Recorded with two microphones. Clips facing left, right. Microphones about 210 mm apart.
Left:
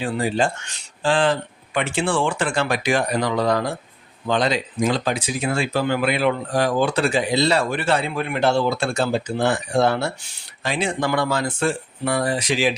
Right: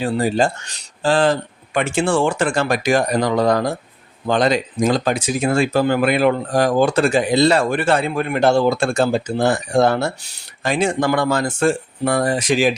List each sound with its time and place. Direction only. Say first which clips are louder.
0.0 s speech: right 4 dB; 40° right (ahead or behind)